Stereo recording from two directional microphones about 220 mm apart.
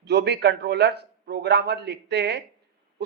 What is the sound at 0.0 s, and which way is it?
A man's voice, 50° right (ahead or behind).